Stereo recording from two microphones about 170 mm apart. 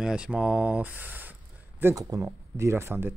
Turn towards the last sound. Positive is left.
turn(degrees=-15)  # may be behind; listen again after turning